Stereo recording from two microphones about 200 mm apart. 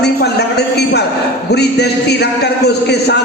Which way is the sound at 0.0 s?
55° left (ahead or behind).